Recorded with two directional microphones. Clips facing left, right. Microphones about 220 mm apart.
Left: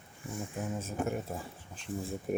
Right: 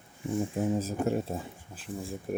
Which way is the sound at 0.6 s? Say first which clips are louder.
Right 4 dB; 35° right (ahead or behind).